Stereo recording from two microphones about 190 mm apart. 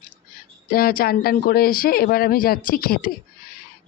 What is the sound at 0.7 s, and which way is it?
Speech, 50° left (ahead or behind).